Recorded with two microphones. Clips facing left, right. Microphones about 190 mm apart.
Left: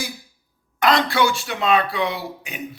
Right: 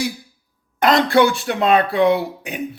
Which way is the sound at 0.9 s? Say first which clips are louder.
Right 5 dB; 55° right (ahead or behind).